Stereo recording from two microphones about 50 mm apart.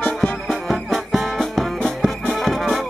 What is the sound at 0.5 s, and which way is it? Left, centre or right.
Music, centre.